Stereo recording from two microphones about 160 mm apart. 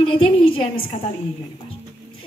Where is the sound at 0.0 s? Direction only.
35° left (ahead or behind).